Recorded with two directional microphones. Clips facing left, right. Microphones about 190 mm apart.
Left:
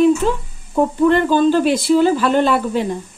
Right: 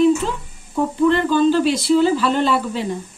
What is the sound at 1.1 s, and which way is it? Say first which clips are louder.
Speech: left 2 dB; 50° left (ahead or behind).